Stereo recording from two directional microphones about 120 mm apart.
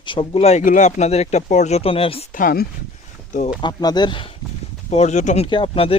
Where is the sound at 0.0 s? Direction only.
45° left (ahead or behind).